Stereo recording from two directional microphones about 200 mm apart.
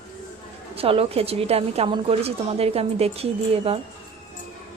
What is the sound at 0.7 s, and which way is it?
A woman's voice, 30° right (ahead or behind).